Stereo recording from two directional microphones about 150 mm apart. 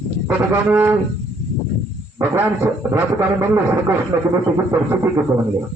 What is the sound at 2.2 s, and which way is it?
Speech, 10° right (ahead or behind).